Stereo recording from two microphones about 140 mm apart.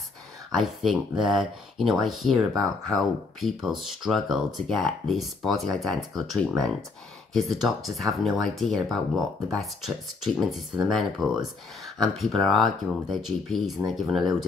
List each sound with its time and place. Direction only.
0.6 s speech: centre (ahead or behind)